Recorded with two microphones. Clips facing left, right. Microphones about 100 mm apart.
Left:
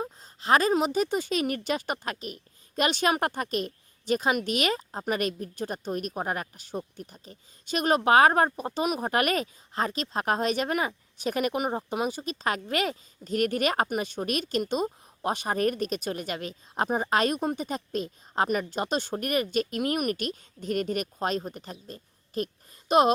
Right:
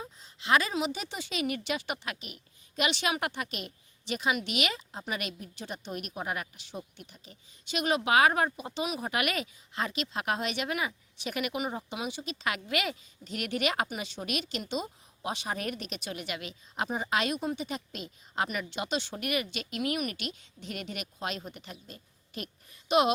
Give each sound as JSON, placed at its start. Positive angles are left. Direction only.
{"t": 0.0, "sound": "a woman's voice", "side_deg": 45}